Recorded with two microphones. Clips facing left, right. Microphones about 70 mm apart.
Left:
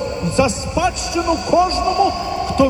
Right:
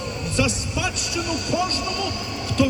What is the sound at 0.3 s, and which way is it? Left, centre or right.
A man's voice, left.